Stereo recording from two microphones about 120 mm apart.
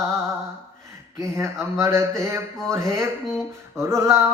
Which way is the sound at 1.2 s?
25° right (ahead or behind).